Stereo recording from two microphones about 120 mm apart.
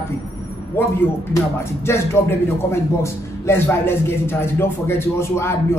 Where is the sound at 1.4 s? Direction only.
20° left (ahead or behind).